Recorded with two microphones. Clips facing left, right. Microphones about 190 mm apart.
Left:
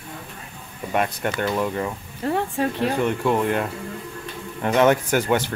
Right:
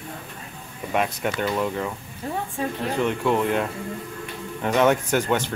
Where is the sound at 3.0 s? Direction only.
5° left (ahead or behind).